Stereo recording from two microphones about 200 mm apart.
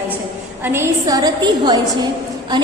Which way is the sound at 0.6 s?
10° right (ahead or behind).